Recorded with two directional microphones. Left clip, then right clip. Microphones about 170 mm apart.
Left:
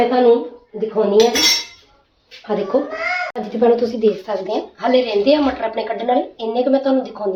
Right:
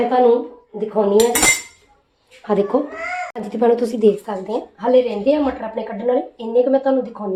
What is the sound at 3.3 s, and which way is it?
A woman's voice, 40° right (ahead or behind).